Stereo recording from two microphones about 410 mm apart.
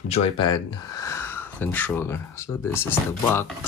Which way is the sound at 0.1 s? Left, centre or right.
Centre.